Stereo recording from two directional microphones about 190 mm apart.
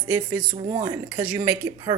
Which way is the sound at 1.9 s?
25° right (ahead or behind).